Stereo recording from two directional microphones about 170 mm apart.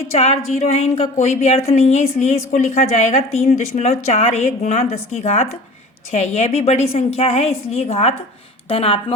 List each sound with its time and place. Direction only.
0.2 s a woman's voice: 40° left (ahead or behind)